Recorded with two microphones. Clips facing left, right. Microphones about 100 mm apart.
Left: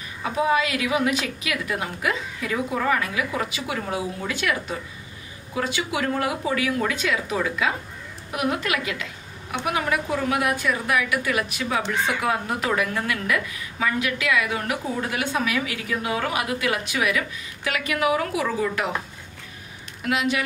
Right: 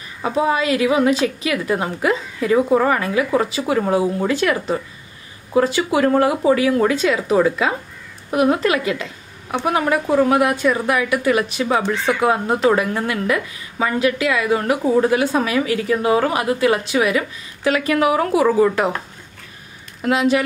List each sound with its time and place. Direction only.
0.2 s speech: 35° right (ahead or behind)
20.0 s speech: 35° right (ahead or behind)